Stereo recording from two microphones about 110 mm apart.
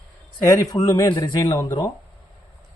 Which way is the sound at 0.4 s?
30° left (ahead or behind).